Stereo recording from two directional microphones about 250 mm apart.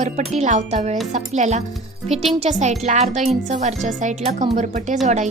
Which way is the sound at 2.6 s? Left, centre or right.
Right.